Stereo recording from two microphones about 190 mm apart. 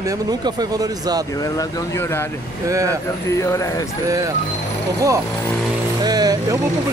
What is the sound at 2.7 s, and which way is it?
Speech, 15° right (ahead or behind).